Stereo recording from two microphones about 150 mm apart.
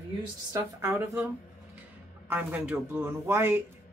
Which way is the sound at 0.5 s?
20° right (ahead or behind).